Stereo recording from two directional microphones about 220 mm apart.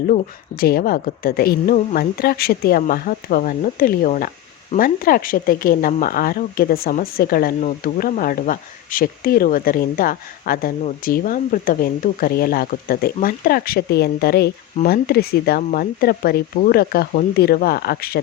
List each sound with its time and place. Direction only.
0.1 s speech: 45° left (ahead or behind)